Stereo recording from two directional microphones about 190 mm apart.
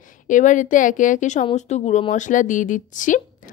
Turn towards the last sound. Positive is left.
turn(degrees=45)  # may be behind; listen again after turning